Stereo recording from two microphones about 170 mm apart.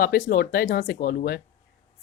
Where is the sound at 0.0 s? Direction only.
60° left (ahead or behind).